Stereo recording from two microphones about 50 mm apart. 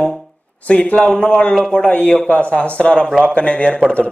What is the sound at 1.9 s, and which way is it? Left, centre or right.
Speech, left.